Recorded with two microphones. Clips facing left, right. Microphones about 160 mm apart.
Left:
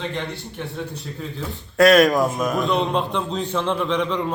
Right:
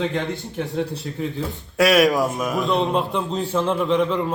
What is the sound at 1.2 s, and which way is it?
A man's voice, 10° right (ahead or behind).